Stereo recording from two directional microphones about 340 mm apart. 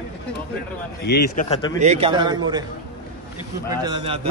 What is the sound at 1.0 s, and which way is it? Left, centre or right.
Speech, left.